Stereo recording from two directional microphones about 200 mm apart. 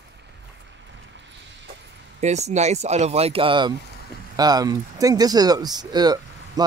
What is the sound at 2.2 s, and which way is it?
Speech, 35° right (ahead or behind).